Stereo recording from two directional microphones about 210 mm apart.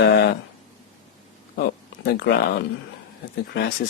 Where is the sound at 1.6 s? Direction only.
50° left (ahead or behind).